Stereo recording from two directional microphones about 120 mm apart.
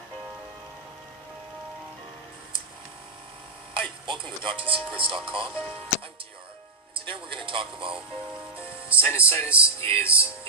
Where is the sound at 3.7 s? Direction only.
45° right (ahead or behind).